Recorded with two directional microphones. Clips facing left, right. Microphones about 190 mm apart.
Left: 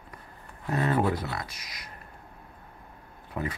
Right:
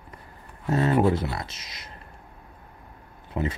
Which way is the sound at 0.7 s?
25° right (ahead or behind).